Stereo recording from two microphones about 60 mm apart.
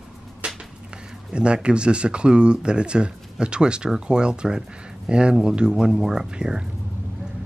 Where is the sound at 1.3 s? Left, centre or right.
Centre.